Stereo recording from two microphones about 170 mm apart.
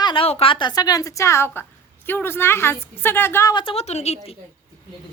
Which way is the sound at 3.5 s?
35° left (ahead or behind).